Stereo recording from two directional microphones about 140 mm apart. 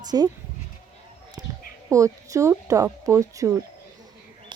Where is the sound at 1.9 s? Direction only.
20° right (ahead or behind).